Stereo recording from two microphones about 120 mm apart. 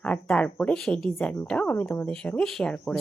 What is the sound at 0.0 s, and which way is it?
Speech, 10° left (ahead or behind).